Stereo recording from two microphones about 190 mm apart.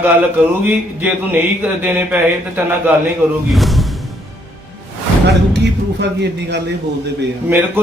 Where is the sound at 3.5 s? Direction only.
Centre (ahead or behind).